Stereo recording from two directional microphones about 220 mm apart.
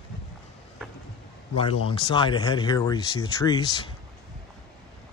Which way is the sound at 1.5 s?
25° left (ahead or behind).